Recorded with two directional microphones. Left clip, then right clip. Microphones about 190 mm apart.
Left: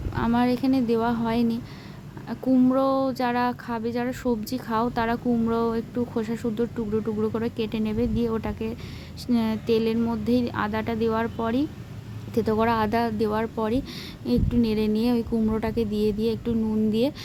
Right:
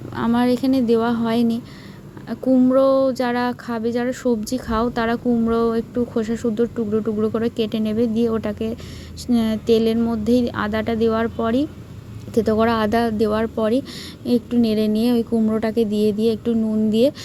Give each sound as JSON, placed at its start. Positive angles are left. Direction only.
{"t": 0.2, "sound": "speech", "side_deg": -15}